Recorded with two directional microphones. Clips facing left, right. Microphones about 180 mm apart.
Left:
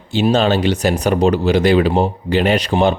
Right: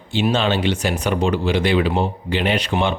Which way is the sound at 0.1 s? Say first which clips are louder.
Left 5 dB; 40° left (ahead or behind).